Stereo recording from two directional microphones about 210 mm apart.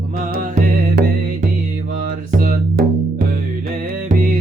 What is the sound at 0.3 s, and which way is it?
Music, 45° right (ahead or behind).